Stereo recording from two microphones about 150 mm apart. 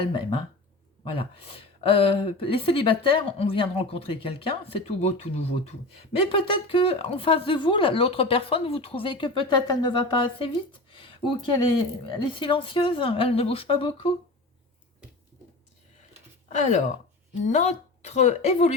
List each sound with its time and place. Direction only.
0.1 s a woman's voice: 35° left (ahead or behind)
16.5 s a woman's voice: 50° left (ahead or behind)